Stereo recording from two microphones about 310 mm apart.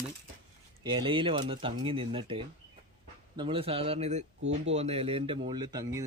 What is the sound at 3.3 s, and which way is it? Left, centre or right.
Speech, centre.